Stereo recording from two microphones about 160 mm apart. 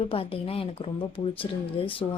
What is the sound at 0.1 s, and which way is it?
A woman's voice, 35° left (ahead or behind).